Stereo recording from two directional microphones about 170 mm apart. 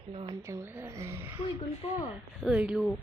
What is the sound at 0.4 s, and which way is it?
Speech, 15° right (ahead or behind).